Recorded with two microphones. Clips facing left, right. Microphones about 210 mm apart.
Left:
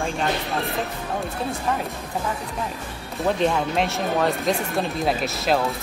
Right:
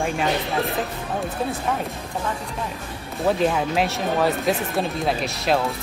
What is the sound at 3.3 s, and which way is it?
Speech, centre (ahead or behind).